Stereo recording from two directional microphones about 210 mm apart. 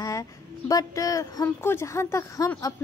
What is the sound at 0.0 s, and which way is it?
A woman's voice, 15° left (ahead or behind).